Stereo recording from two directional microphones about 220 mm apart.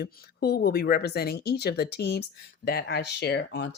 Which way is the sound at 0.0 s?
45° left (ahead or behind).